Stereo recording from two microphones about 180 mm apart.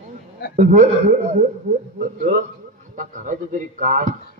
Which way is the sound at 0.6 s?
45° right (ahead or behind).